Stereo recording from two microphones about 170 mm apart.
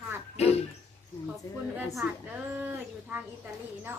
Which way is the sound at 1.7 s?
Centre (ahead or behind).